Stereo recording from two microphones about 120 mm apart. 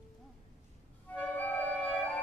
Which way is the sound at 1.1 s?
15° left (ahead or behind).